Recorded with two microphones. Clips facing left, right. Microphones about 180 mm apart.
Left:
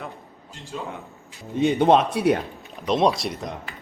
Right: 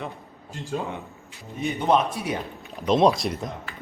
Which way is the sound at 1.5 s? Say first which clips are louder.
Left 5 dB; 85° left.